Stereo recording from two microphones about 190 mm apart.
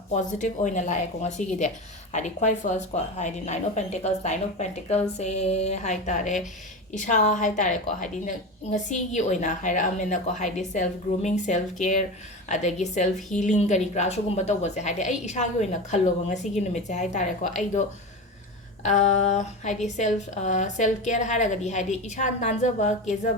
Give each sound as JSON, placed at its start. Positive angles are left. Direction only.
{"t": 0.1, "sound": "speech", "side_deg": 40}